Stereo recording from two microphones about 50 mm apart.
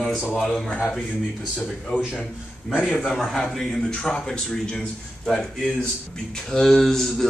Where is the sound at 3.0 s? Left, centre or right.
Centre.